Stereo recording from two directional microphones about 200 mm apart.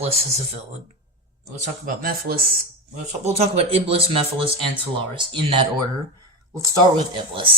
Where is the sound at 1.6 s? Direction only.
45° right (ahead or behind).